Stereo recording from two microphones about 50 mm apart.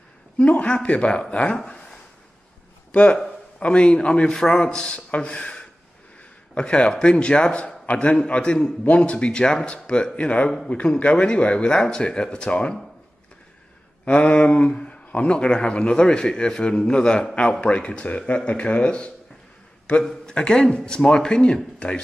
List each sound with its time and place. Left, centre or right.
0.4 s a man's voice: left
1.7 s a sound: centre
2.9 s a man's voice: left
14.0 s a sound: left
15.0 s a man's voice: left
20.0 s a man's voice: centre